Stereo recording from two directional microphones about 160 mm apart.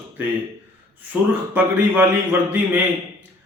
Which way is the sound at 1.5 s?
10° right (ahead or behind).